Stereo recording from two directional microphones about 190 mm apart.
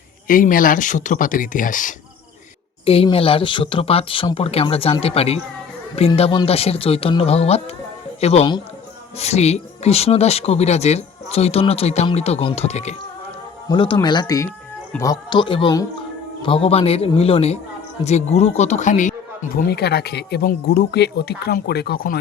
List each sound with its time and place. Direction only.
0.3 s speech: 45° left (ahead or behind)
2.8 s speech: 30° left (ahead or behind)
13.7 s speech: 25° left (ahead or behind); by 19.1 s 40° left (ahead or behind)
19.5 s speech: 55° left (ahead or behind)